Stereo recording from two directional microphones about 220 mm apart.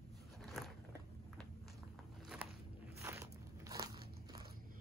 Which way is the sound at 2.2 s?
5° right (ahead or behind).